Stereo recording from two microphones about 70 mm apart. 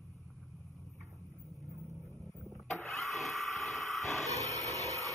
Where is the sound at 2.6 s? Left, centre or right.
Centre.